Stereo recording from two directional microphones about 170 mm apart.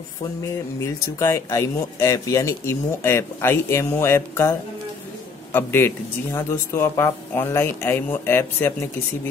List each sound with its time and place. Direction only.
1.2 s speech: 15° left (ahead or behind)